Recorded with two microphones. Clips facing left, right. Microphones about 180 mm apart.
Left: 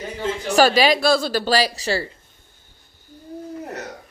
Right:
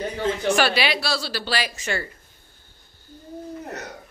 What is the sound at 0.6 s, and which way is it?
A woman's voice, 40° left (ahead or behind).